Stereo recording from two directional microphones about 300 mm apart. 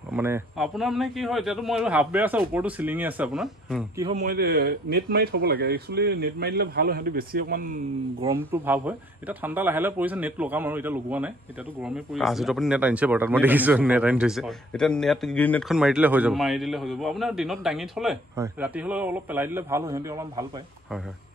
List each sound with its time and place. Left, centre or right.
0.1 s speech: centre
4.2 s speech: right
8.5 s speech: centre